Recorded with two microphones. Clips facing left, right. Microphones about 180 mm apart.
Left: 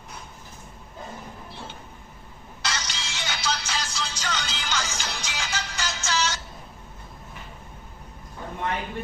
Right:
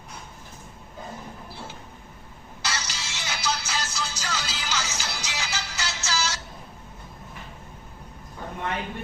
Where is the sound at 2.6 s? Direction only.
5° right (ahead or behind).